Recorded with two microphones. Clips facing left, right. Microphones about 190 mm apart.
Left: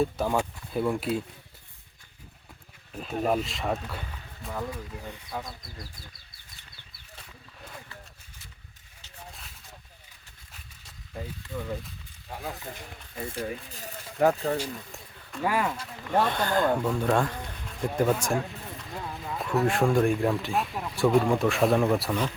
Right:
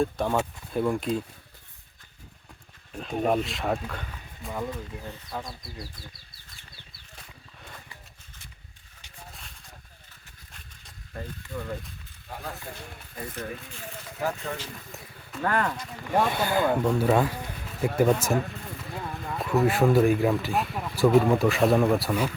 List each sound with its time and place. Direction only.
0.0 s speech: 5° left (ahead or behind)
2.9 s speech: 5° left (ahead or behind)
11.1 s speech: 5° left (ahead or behind)
12.7 s speech: 25° left (ahead or behind)
13.4 s speech: 40° left (ahead or behind)
15.4 s speech: 10° left (ahead or behind)
16.0 s speech: 10° right (ahead or behind)